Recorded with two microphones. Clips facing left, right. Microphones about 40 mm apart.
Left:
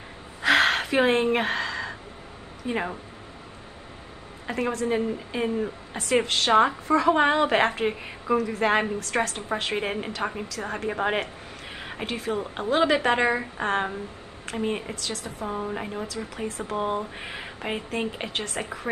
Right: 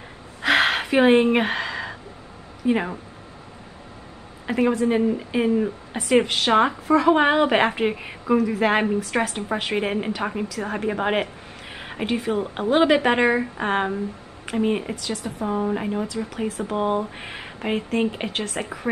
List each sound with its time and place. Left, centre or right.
0.4 s gasp: centre
1.0 s speech: right
1.3 s a sound: centre
2.7 s speech: centre
4.5 s speech: centre